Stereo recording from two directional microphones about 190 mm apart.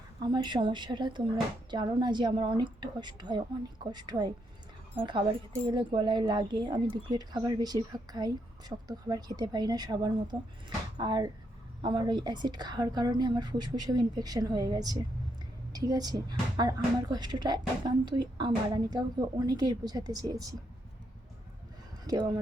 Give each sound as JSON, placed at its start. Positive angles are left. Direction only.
{"t": 0.2, "sound": "speech", "side_deg": -25}
{"t": 22.0, "sound": "speech", "side_deg": -20}